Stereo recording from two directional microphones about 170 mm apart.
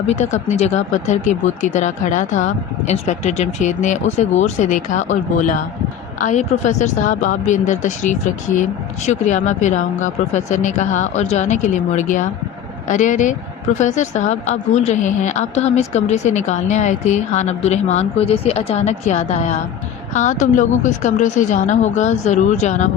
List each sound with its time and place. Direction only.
0.1 s a woman's voice: 40° left (ahead or behind)